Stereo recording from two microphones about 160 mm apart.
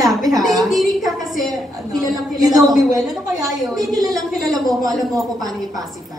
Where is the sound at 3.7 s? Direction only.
20° right (ahead or behind).